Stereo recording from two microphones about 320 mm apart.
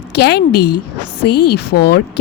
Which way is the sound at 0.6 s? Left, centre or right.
Left.